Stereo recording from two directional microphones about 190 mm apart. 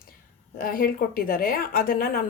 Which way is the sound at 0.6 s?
50° left (ahead or behind).